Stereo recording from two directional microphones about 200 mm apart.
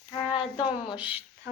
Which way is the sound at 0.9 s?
5° right (ahead or behind).